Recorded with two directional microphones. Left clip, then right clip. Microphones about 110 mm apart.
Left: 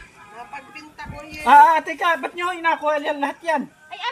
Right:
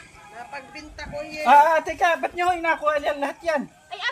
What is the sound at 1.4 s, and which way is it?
A woman's voice, 30° right (ahead or behind).